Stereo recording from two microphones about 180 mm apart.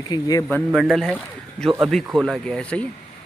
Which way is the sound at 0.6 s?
5° right (ahead or behind).